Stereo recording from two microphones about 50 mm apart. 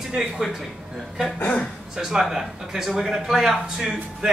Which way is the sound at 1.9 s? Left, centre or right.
Centre.